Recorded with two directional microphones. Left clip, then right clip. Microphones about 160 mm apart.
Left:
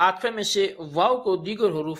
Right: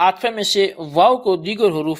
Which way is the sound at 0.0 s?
40° right (ahead or behind).